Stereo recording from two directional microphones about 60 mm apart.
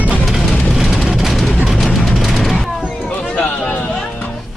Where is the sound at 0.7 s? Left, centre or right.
Centre.